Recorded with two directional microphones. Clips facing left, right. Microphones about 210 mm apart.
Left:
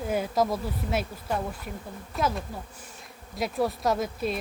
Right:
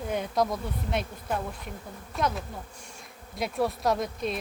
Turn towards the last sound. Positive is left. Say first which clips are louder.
# left 1 dB
turn(degrees=5)  # may be behind; listen again after turning